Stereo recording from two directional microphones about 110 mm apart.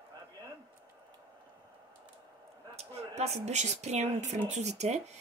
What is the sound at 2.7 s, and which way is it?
Speech, 80° right.